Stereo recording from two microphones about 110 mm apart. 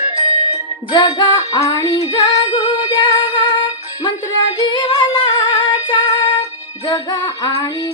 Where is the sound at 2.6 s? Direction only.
45° left (ahead or behind).